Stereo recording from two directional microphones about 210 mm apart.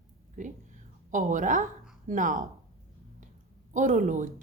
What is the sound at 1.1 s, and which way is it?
A woman's voice, 35° right (ahead or behind).